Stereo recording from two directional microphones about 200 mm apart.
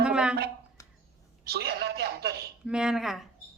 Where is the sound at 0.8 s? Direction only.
15° left (ahead or behind).